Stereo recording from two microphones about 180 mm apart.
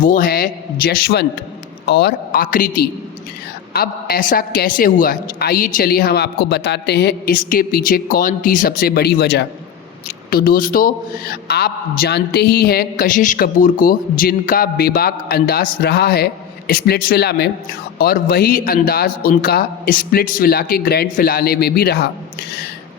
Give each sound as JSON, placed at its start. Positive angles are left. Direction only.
{"t": 0.0, "sound": "a man's voice", "side_deg": 50}
{"t": 10.2, "sound": "a man's voice", "side_deg": 55}